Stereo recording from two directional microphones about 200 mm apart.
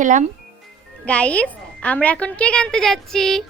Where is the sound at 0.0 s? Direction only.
40° right (ahead or behind).